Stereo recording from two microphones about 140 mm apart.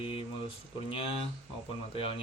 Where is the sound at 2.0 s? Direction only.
40° left (ahead or behind).